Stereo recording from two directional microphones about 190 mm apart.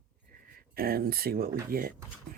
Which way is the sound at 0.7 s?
50° right (ahead or behind).